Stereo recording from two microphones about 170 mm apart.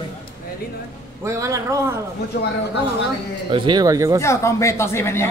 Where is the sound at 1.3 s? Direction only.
20° right (ahead or behind).